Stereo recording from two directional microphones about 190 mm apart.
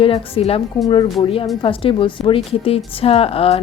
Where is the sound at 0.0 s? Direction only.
30° left (ahead or behind).